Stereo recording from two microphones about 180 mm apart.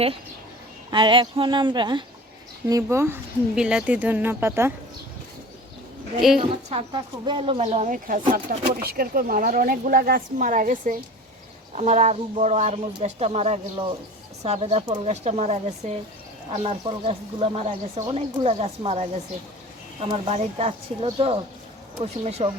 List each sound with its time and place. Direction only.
0.9 s speech: 25° right (ahead or behind)
6.4 s speech: 30° right (ahead or behind)